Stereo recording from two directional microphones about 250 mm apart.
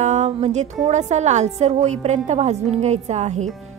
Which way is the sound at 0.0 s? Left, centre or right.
Right.